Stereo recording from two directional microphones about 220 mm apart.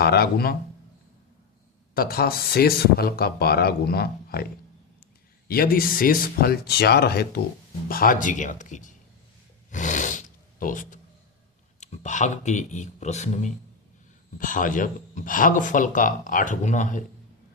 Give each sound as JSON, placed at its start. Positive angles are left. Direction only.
{"t": 0.0, "sound": "speech", "side_deg": 45}
{"t": 2.0, "sound": "speech", "side_deg": 45}
{"t": 5.5, "sound": "speech", "side_deg": 45}
{"t": 9.7, "sound": "roar", "side_deg": 35}
{"t": 11.8, "sound": "speech", "side_deg": 30}